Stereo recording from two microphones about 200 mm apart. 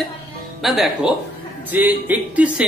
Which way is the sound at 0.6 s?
Centre (ahead or behind).